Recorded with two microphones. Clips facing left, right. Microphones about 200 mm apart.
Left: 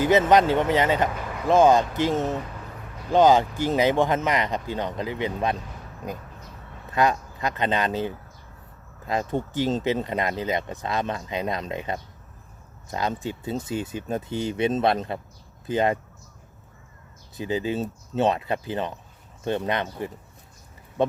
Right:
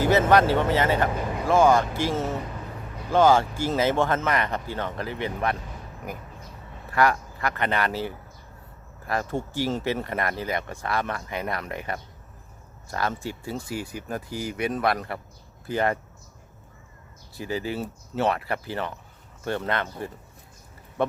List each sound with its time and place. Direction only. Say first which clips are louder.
0.0 s speech: left 1 dB; 20° left (ahead or behind)
17.3 s speech: left 3 dB; 20° left (ahead or behind)